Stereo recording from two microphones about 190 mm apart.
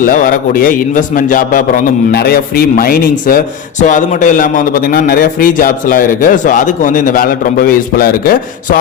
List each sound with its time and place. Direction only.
0.0 s a man's voice: 45° left (ahead or behind)